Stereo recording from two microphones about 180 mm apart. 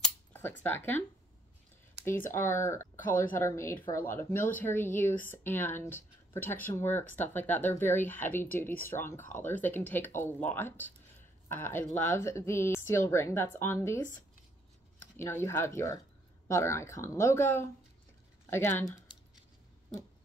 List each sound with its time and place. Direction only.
0.0 s a sound: 10° left (ahead or behind)
2.3 s speech: 15° left (ahead or behind)
15.1 s speech: 15° left (ahead or behind)